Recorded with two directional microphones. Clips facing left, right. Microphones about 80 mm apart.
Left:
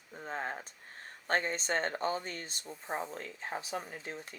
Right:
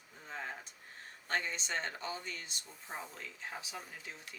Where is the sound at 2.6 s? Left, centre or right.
Left.